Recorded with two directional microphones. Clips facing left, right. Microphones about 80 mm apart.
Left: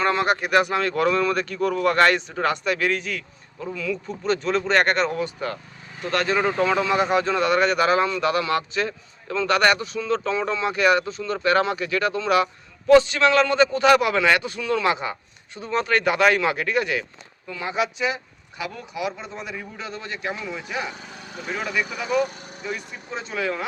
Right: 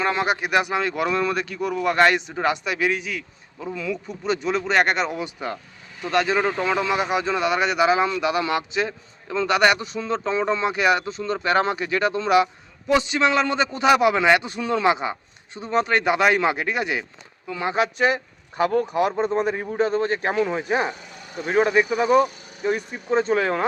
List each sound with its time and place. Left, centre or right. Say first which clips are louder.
0.0 s speech: left 1 dB; centre
3.8 s a man's voice: left 1 dB; centre
17.5 s a man's voice: right 3 dB; right
17.9 s speech: right 5 dB; right